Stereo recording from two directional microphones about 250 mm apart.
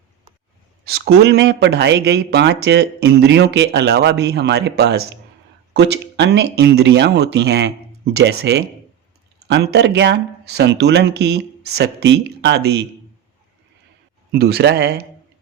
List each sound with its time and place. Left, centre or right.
0.9 s speech: right
14.3 s speech: right